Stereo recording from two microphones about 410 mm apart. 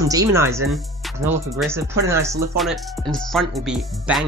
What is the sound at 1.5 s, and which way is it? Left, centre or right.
Speech, centre.